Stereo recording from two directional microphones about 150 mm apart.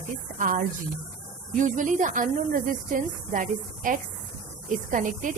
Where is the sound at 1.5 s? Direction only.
60° right (ahead or behind).